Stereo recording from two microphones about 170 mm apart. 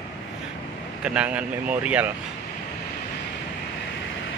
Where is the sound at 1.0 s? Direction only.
5° right (ahead or behind).